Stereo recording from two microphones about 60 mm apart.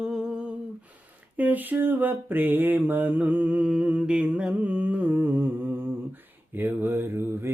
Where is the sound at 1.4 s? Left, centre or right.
Right; by 4.5 s centre.